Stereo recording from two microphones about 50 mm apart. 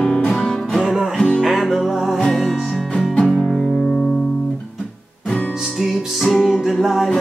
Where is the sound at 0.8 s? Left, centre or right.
Centre.